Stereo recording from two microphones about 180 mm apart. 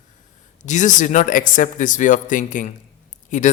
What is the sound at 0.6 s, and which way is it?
Speech, 40° left (ahead or behind).